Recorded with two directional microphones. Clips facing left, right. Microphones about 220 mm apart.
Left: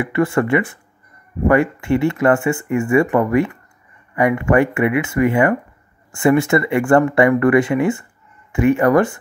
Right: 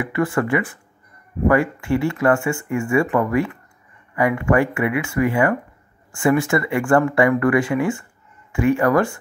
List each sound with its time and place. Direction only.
0.0 s speech: 25° left (ahead or behind)